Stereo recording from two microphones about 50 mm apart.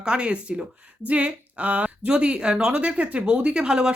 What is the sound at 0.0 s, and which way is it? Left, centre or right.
A woman's voice, right.